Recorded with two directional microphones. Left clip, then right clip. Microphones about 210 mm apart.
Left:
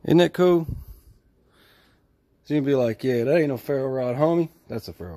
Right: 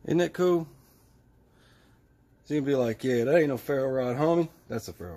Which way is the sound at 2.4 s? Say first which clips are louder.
Left 5 dB; 45° left (ahead or behind).